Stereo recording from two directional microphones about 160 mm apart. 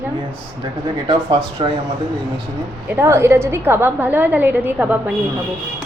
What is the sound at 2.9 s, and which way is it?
A woman's voice, 15° right (ahead or behind).